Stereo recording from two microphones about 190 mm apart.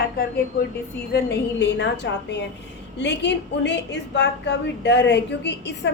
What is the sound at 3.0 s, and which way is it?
A woman's voice, 65° left (ahead or behind).